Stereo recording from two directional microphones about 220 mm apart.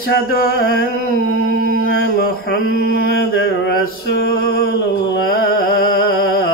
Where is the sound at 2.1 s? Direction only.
45° left (ahead or behind).